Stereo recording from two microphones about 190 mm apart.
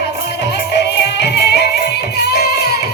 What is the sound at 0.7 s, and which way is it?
Music, 60° left (ahead or behind).